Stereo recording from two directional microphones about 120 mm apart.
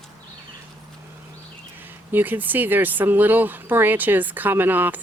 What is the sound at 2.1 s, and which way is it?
Speech, 15° right (ahead or behind).